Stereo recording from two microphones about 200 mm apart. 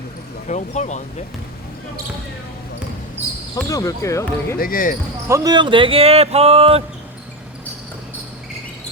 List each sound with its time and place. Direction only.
0.4 s speech: 35° left (ahead or behind)
3.5 s speech: 15° left (ahead or behind)
4.5 s speech: 45° left (ahead or behind)
5.3 s speech: 20° right (ahead or behind)